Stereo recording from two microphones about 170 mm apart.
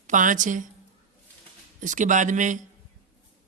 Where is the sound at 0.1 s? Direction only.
50° right (ahead or behind).